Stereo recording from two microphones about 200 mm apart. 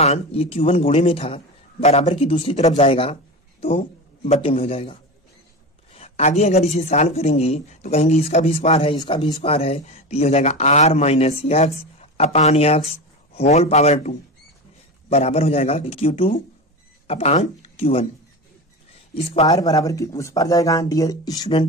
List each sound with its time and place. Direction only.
0.0 s a man's voice: 30° left (ahead or behind)
5.9 s a man's voice: 30° left (ahead or behind)
19.4 s speech: 20° left (ahead or behind)